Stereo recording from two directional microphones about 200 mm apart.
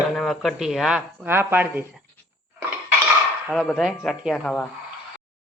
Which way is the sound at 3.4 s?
Centre (ahead or behind).